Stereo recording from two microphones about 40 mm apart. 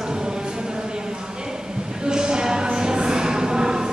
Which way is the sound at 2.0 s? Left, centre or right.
Centre.